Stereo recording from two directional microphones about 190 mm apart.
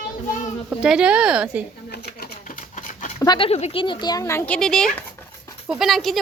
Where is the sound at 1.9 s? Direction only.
55° left (ahead or behind).